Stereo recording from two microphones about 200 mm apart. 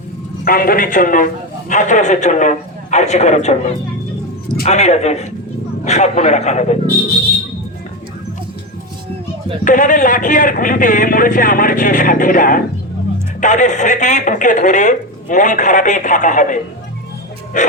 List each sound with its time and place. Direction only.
0.4 s a man's voice: 45° left (ahead or behind)
9.6 s a man's voice: 40° left (ahead or behind)